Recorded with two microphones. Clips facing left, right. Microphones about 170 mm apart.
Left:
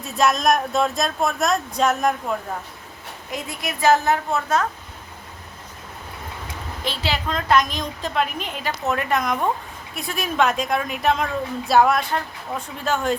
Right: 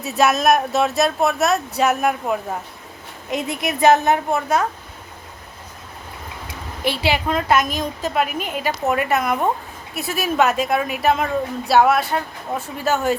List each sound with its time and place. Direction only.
0.0 s speech: 5° right (ahead or behind)
3.2 s a woman's voice: 20° right (ahead or behind)
6.8 s a woman's voice: 10° right (ahead or behind)